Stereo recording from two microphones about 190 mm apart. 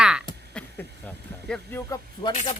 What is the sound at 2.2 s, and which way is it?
Speech, 25° left (ahead or behind).